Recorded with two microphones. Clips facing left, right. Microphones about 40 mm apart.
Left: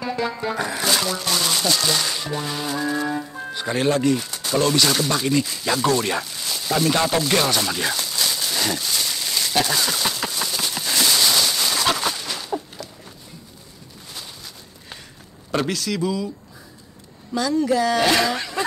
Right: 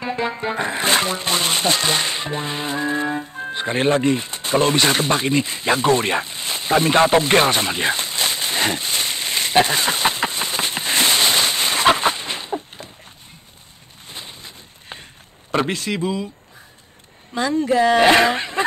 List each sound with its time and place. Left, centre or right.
0.0 s music: right
14.0 s a sound: right
15.5 s speech: right
17.3 s speech: right